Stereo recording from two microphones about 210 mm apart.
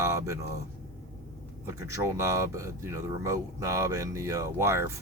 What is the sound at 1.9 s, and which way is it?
Speech, 15° right (ahead or behind).